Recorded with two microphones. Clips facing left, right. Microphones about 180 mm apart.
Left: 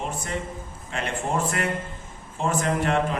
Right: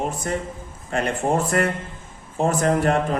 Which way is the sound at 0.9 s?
40° right (ahead or behind).